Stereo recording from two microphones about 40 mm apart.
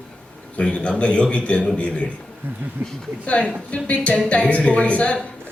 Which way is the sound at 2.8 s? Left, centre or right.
Right.